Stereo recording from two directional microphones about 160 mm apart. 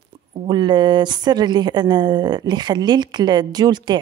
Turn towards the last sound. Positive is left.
turn(degrees=-25)  # may be behind; listen again after turning